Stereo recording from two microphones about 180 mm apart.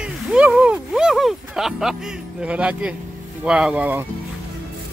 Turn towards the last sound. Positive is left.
turn(degrees=-10)  # may be behind; listen again after turning